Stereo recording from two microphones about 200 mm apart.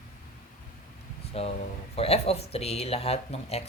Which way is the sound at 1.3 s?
30° left (ahead or behind).